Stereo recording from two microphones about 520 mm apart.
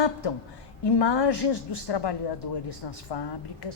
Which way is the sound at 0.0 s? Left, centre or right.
Left.